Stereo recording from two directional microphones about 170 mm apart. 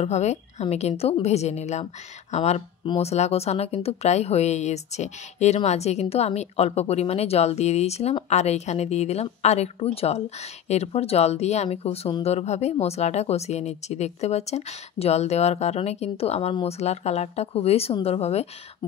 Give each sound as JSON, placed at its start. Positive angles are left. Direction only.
{"t": 0.0, "sound": "a woman's voice", "side_deg": 40}